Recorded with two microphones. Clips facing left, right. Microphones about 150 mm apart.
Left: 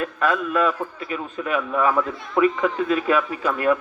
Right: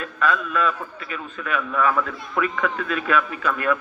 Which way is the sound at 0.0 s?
50° left (ahead or behind).